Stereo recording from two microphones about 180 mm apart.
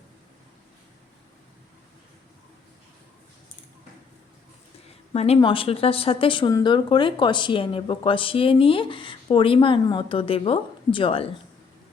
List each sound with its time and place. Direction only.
5.1 s speech: 35° left (ahead or behind)